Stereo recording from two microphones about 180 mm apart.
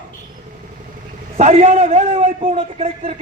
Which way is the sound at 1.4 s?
35° right (ahead or behind).